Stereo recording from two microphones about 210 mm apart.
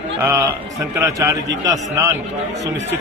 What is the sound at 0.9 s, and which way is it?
Speech, 10° right (ahead or behind).